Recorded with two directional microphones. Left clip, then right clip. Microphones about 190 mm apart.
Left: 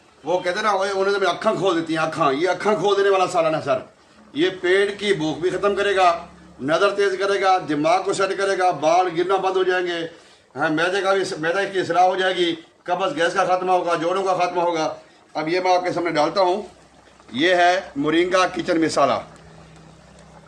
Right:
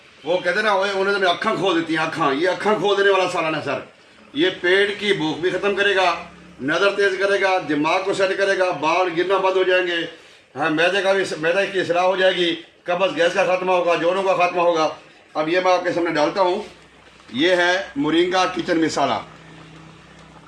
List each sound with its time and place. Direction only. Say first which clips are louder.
0.3 s a man's voice: right 2 dB; 20° left (ahead or behind)
15.5 s a man's voice: right 1 dB; 30° left (ahead or behind)